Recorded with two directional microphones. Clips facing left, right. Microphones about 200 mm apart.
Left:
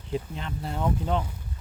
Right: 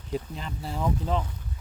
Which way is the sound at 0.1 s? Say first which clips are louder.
Left 1 dB; centre (ahead or behind).